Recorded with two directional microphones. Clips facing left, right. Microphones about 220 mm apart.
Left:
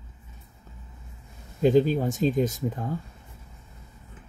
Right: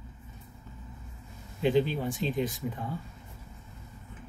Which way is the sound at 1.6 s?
40° left (ahead or behind).